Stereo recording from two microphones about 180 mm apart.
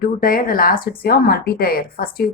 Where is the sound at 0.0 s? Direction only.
55° left (ahead or behind).